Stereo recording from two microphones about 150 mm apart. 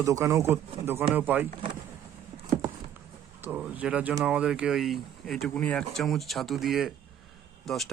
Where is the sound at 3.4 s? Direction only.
10° right (ahead or behind).